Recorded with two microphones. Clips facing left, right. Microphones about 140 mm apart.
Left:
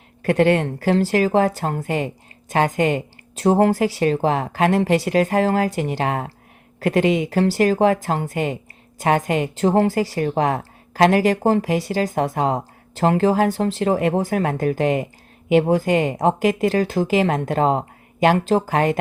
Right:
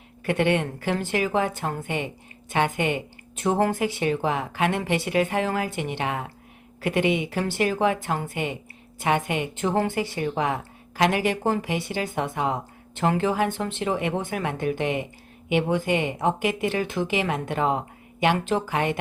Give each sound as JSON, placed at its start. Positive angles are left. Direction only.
{"t": 0.2, "sound": "a woman's voice", "side_deg": 40}